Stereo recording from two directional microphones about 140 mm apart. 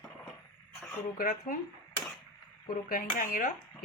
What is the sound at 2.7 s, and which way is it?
Speech, 85° left.